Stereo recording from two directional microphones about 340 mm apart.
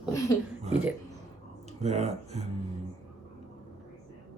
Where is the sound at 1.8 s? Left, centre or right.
Centre.